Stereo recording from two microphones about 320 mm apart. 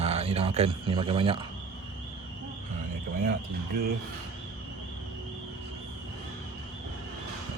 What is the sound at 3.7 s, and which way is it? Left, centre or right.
Speech, right.